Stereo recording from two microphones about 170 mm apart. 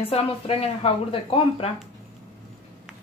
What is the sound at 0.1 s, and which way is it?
Speech, 35° left (ahead or behind).